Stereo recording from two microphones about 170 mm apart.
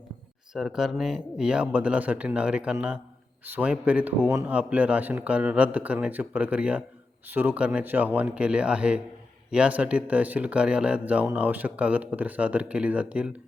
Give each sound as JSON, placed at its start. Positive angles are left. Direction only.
{"t": 0.5, "sound": "speech", "side_deg": -5}